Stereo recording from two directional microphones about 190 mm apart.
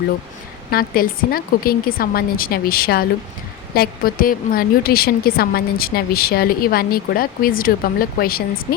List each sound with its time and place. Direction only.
0.7 s a woman's voice: 50° left (ahead or behind)